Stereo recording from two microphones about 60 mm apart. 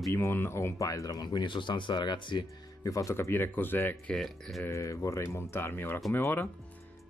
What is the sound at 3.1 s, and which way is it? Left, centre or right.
Speech, left.